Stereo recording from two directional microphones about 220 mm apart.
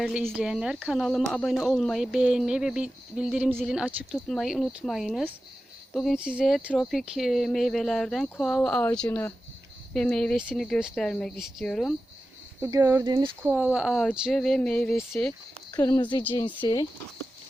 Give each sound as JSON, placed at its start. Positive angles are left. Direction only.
{"t": 0.0, "sound": "speech", "side_deg": 0}
{"t": 12.6, "sound": "speech", "side_deg": -10}
{"t": 13.5, "sound": "a woman's voice", "side_deg": -5}